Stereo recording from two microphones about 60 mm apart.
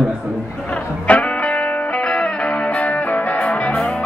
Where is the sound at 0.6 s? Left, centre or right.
Left.